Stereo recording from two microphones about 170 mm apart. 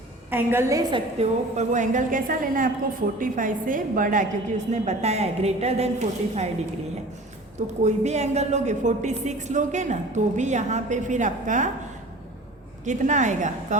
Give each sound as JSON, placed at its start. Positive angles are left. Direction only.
{"t": 0.3, "sound": "a woman's voice", "side_deg": -15}
{"t": 1.5, "sound": "a woman's voice", "side_deg": -45}
{"t": 7.9, "sound": "a woman's voice", "side_deg": -40}
{"t": 12.8, "sound": "a woman's voice", "side_deg": -45}